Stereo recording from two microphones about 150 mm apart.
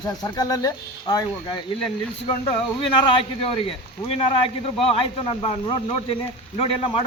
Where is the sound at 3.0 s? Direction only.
35° left (ahead or behind).